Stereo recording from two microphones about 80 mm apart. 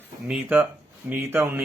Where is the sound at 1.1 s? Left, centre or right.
Right.